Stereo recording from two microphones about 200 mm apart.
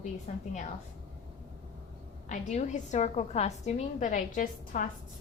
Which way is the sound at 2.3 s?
35° left (ahead or behind).